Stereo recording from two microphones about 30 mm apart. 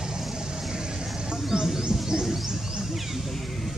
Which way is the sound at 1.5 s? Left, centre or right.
Right.